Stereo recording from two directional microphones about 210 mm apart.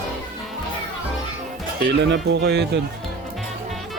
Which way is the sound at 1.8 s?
55° right (ahead or behind).